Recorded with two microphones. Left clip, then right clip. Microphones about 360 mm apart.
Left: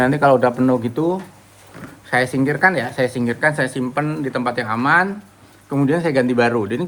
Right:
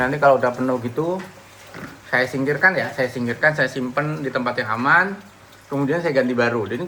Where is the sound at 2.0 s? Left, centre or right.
Left.